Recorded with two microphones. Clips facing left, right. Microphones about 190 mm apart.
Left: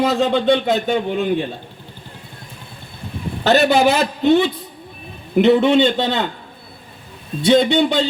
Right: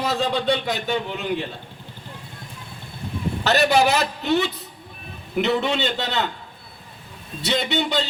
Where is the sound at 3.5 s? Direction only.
55° left (ahead or behind).